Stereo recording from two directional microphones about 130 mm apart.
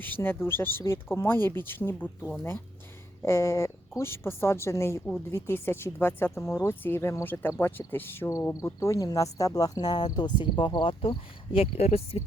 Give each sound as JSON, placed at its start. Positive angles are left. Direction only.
{"t": 0.0, "sound": "speech", "side_deg": 15}